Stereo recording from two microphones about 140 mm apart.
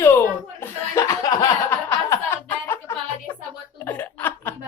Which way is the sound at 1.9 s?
20° left (ahead or behind).